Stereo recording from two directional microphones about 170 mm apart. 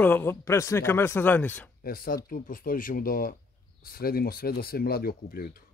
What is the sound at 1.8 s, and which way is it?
Speech, 60° left (ahead or behind).